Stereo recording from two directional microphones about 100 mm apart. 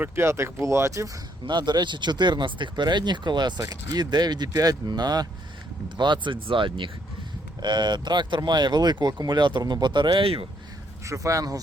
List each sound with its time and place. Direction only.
0.0 s speech: 25° right (ahead or behind)
1.5 s speech: 45° right (ahead or behind); by 10.4 s 60° right (ahead or behind)
11.0 s speech: 30° right (ahead or behind)